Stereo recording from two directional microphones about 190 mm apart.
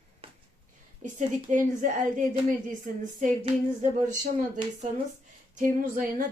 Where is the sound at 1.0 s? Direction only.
40° right (ahead or behind).